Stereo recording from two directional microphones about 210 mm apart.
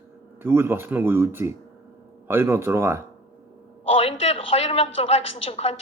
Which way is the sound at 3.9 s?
30° left (ahead or behind).